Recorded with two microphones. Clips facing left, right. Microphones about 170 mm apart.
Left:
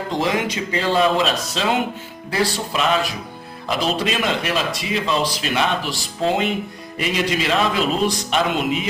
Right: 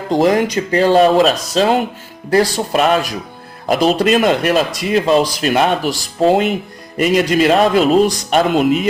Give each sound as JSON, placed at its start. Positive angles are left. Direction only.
{"t": 0.1, "sound": "a man's voice", "side_deg": -45}